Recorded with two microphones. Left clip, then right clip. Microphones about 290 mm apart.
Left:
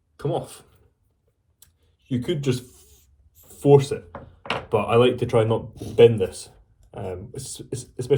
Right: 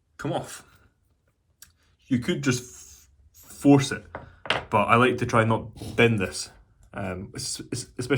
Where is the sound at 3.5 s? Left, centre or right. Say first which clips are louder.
Left 4 dB; right.